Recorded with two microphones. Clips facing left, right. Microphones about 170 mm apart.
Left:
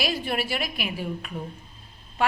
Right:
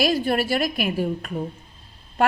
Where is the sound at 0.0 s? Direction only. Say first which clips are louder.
Right 7 dB; 40° right (ahead or behind).